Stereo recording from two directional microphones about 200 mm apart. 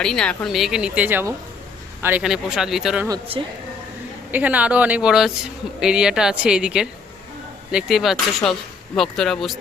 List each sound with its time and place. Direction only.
0.0 s speech: 5° left (ahead or behind)
3.1 s speech: 25° right (ahead or behind)
4.3 s speech: 10° right (ahead or behind)